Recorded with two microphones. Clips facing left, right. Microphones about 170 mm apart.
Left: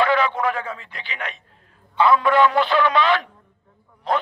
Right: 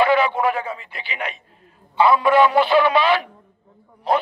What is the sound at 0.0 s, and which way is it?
A man's voice, 10° right (ahead or behind).